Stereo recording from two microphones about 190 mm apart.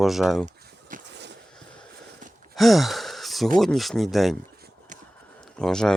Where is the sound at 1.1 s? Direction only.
65° right (ahead or behind).